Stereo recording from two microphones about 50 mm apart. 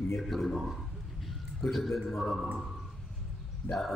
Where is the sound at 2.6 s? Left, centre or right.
Centre.